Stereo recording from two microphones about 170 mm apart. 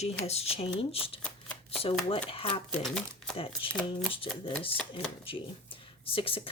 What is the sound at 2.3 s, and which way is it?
Speech, 35° left (ahead or behind).